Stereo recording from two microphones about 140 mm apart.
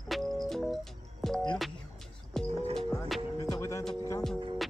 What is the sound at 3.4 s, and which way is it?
Music, 20° left (ahead or behind).